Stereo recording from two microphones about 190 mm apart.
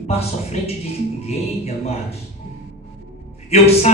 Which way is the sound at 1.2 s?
35° left (ahead or behind).